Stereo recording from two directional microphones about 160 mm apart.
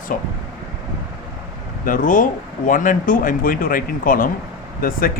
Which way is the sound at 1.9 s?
55° left (ahead or behind).